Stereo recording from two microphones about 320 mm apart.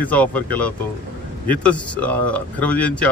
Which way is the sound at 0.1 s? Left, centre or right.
Centre.